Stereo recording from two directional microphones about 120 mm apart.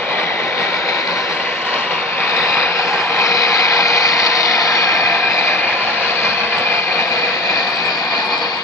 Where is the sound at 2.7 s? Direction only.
25° left (ahead or behind).